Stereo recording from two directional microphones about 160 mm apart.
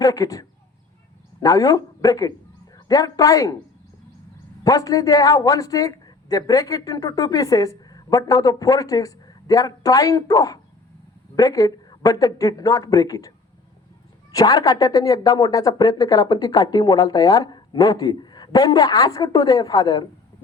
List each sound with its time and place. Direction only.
0.0 s a man's voice: 20° left (ahead or behind)
4.6 s speech: 20° left (ahead or behind)
14.3 s speech: 20° left (ahead or behind)